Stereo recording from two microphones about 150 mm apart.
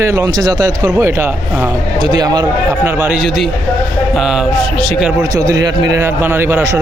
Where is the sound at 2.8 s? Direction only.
15° right (ahead or behind).